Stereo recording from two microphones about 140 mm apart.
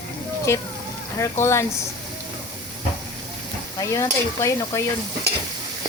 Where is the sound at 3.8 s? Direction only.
20° left (ahead or behind).